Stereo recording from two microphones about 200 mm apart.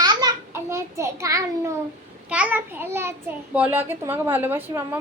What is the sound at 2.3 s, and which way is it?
A child's voice, 5° right (ahead or behind).